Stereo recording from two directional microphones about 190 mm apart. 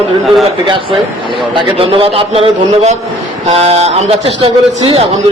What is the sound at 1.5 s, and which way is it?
A man's voice, 30° right (ahead or behind).